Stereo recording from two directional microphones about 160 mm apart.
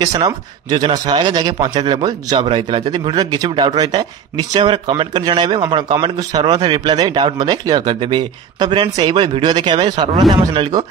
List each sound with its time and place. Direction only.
0.0 s a man's voice: 25° right (ahead or behind)